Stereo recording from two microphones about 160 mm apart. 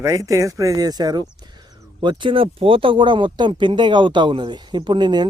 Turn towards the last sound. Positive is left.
turn(degrees=-30)  # may be behind; listen again after turning